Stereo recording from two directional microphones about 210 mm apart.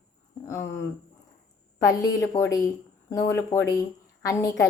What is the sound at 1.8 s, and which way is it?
A woman's voice, 15° left (ahead or behind).